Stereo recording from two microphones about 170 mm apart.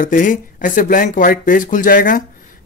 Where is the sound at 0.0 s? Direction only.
50° left (ahead or behind).